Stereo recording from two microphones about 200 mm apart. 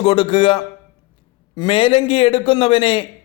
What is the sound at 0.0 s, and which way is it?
A man's voice, 25° left (ahead or behind).